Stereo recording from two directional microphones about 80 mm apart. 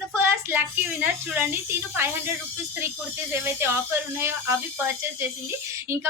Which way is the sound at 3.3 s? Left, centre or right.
Right.